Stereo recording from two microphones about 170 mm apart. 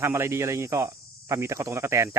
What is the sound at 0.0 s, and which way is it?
Speech, 15° right (ahead or behind).